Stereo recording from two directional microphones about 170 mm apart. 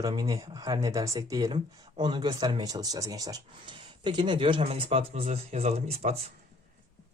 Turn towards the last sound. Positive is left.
turn(degrees=-40)  # may be behind; listen again after turning